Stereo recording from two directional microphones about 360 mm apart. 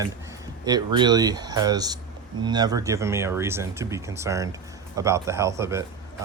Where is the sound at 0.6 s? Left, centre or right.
Centre.